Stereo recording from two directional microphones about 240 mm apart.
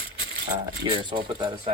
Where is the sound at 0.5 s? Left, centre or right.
Centre.